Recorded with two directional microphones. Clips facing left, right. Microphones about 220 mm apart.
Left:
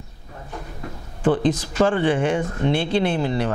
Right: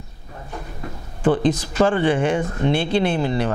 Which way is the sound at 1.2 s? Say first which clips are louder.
Right 1 dB; 15° right (ahead or behind).